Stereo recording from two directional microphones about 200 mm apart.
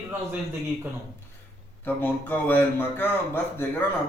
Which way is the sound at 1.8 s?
10° left (ahead or behind).